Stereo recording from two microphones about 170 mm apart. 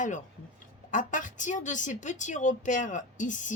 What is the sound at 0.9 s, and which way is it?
A woman's voice, 50° left (ahead or behind).